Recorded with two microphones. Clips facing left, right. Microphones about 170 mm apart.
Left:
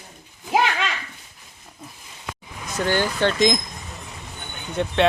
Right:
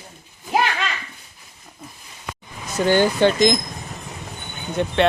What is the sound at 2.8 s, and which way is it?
Speech, 15° right (ahead or behind).